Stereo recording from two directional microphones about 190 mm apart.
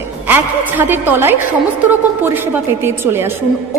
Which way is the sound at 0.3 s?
10° right (ahead or behind).